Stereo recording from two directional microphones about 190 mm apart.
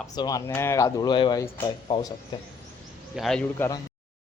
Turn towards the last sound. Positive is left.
turn(degrees=10)  # may be behind; listen again after turning